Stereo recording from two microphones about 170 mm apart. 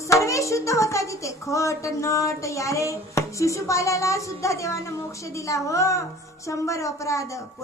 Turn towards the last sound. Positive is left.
turn(degrees=20)  # may be behind; listen again after turning